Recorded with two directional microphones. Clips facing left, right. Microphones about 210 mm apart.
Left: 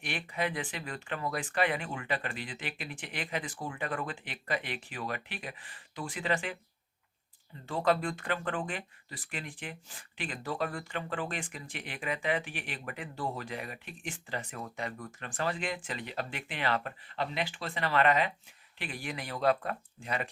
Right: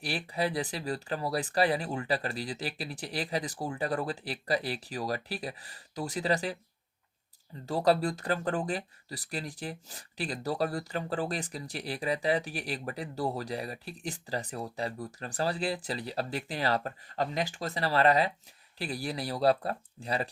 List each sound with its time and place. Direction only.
0.0 s speech: 35° right (ahead or behind)
7.7 s speech: 40° right (ahead or behind)